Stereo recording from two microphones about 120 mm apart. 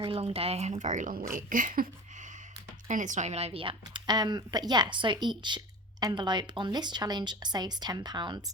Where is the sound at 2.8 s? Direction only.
90° right; by 8.4 s 40° right (ahead or behind).